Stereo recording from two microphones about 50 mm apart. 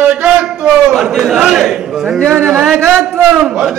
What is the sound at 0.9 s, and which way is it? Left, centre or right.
A man's voice, centre.